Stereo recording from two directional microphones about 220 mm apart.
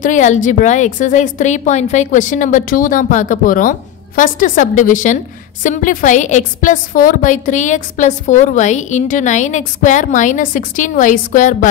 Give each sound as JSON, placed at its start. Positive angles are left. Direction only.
{"t": 0.0, "sound": "a woman's voice", "side_deg": 35}